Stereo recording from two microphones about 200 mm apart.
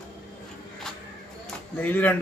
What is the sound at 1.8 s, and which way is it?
Speech, 10° left (ahead or behind).